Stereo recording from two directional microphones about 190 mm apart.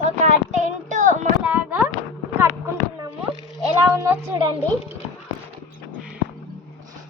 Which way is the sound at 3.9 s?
15° right (ahead or behind).